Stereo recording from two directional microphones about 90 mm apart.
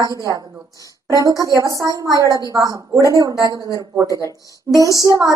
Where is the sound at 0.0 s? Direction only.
40° right (ahead or behind).